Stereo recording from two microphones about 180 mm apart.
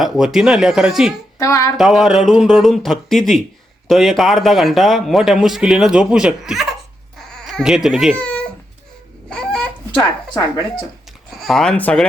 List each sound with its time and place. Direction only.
0.0 s a man's voice: centre (ahead or behind)
1.4 s speech: 15° left (ahead or behind)
1.7 s a man's voice: centre (ahead or behind)
7.2 s a sound: centre (ahead or behind)
8.2 s babbling: 5° left (ahead or behind)
9.3 s a sound: 5° left (ahead or behind)
11.3 s speech: centre (ahead or behind)